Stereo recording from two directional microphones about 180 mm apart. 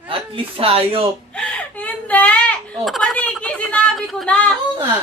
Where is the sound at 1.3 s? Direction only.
5° left (ahead or behind).